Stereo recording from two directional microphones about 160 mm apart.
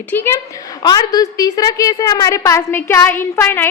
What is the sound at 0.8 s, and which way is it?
A woman's voice, 25° left (ahead or behind).